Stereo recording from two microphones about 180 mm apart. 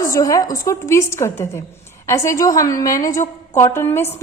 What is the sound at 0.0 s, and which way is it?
A woman's voice, 20° left (ahead or behind).